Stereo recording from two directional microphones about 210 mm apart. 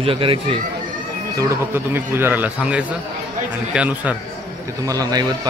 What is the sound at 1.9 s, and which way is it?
Speech, 10° right (ahead or behind).